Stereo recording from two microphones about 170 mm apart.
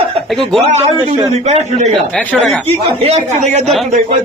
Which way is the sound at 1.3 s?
40° right (ahead or behind).